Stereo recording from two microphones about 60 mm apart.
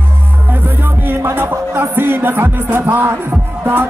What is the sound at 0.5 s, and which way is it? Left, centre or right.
Music, right.